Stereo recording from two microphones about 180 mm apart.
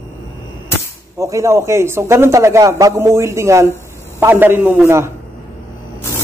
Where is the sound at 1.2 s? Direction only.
15° right (ahead or behind).